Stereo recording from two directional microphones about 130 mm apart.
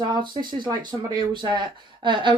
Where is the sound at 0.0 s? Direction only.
35° right (ahead or behind).